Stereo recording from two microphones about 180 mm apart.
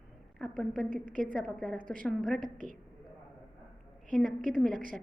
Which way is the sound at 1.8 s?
50° right (ahead or behind).